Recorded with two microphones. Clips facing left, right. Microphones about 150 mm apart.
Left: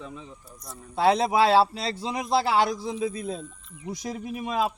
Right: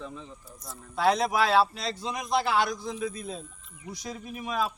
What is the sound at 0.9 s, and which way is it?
A man's voice, 25° left (ahead or behind).